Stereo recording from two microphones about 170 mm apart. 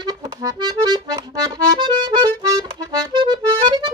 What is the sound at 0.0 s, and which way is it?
Accordion, 20° right (ahead or behind).